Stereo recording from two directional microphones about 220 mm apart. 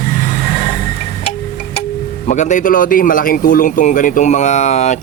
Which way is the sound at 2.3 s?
35° left (ahead or behind).